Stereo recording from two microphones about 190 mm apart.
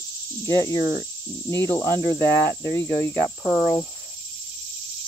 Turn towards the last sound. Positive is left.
turn(degrees=10)  # may be behind; listen again after turning